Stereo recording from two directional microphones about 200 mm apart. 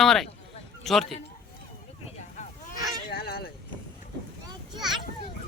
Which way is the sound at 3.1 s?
50° left (ahead or behind).